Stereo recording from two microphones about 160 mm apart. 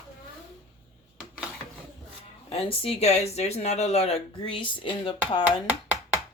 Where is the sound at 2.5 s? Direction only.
35° left (ahead or behind).